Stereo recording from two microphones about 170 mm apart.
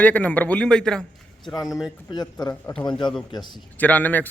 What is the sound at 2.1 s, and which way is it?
A man's voice, 25° left (ahead or behind).